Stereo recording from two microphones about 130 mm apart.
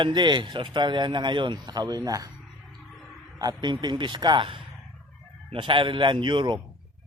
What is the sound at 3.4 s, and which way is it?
A man's voice, 35° right (ahead or behind).